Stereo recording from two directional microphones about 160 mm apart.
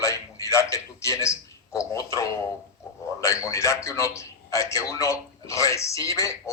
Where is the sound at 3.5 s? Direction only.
20° left (ahead or behind).